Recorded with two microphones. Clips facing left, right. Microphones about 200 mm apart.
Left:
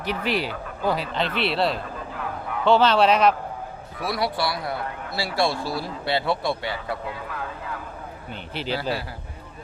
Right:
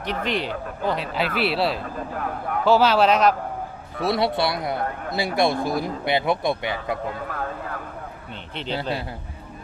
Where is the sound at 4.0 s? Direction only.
25° right (ahead or behind).